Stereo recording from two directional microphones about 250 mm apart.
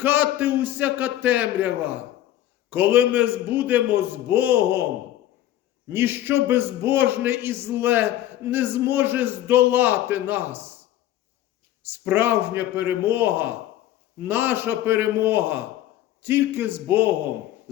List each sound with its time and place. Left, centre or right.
0.0 s a man's voice: centre
5.9 s a man's voice: centre
11.9 s a man's voice: centre